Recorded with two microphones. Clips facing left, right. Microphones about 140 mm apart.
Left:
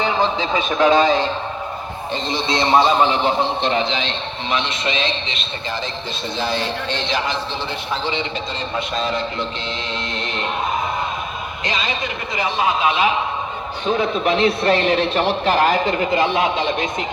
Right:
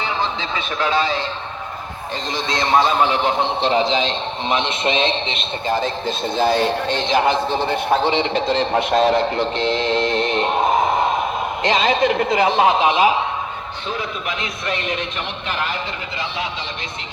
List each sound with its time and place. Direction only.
0.0 s a man's voice: 15° left (ahead or behind)
2.3 s a man's voice: 45° right (ahead or behind)
2.7 s a man's voice: 5° right (ahead or behind)
3.6 s a man's voice: 35° right (ahead or behind); by 10.2 s 60° right (ahead or behind)
10.4 s a sound: 45° right (ahead or behind)
11.8 s a man's voice: 60° right (ahead or behind)
13.9 s a man's voice: 30° left (ahead or behind); by 16.7 s 55° left (ahead or behind)